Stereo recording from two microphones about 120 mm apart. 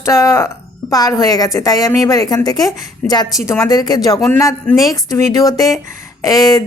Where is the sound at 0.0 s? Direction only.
25° left (ahead or behind).